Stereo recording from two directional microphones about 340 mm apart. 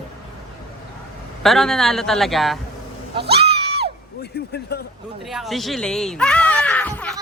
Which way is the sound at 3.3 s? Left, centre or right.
Centre.